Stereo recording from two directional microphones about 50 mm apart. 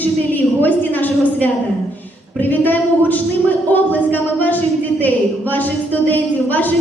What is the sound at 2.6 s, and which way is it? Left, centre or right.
A woman's voice, left.